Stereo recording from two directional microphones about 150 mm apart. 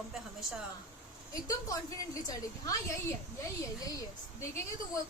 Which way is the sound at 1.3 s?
25° left (ahead or behind).